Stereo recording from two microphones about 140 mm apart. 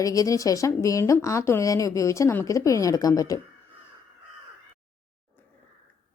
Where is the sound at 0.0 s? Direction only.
25° left (ahead or behind).